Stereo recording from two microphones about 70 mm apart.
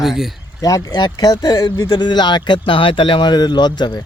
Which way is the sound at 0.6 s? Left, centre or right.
Left.